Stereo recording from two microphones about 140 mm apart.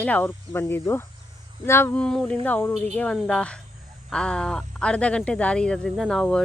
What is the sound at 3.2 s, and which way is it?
Speech, 5° left (ahead or behind).